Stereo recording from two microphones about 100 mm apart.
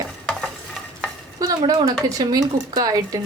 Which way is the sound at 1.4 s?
35° right (ahead or behind).